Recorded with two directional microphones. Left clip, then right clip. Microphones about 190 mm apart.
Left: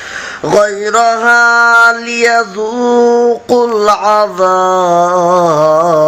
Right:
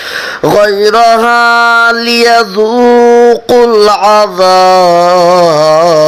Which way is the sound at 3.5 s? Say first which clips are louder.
Right 4 dB; 30° right (ahead or behind).